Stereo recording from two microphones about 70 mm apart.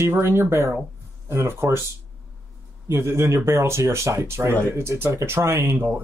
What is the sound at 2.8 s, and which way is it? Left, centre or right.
Speech, right.